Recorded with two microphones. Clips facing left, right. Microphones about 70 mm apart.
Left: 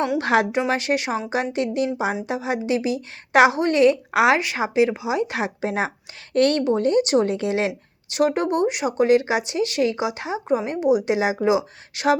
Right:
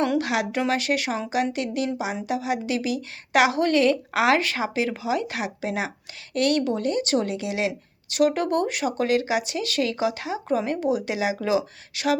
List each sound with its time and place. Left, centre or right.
0.2 s a woman's voice: left
7.3 s a woman's voice: left